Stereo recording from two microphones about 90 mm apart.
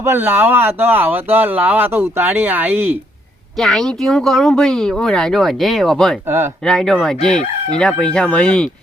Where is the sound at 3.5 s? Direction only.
5° left (ahead or behind).